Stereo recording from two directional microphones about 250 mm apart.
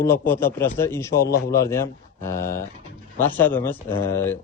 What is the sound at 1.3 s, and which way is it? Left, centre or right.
Speech, left.